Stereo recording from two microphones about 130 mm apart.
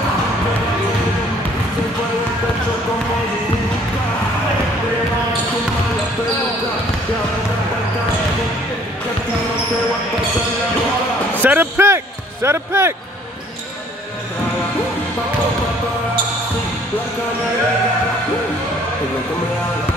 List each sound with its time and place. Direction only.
11.4 s speech: 15° right (ahead or behind)